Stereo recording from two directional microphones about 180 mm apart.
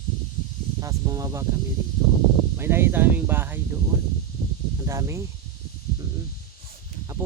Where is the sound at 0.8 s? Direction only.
20° right (ahead or behind).